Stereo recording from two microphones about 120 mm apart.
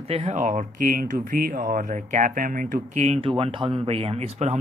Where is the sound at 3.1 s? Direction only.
50° right (ahead or behind).